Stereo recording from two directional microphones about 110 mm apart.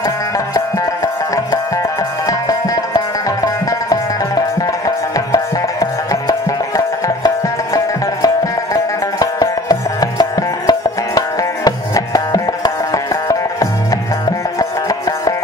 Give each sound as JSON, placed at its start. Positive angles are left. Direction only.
{"t": 1.0, "sound": "music", "side_deg": 30}
{"t": 4.6, "sound": "music", "side_deg": 30}